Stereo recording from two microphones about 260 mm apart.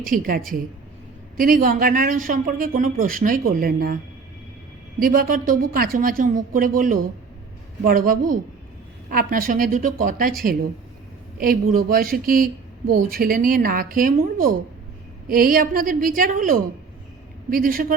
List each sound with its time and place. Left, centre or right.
0.0 s speech: right
4.9 s speech: right
11.3 s speech: right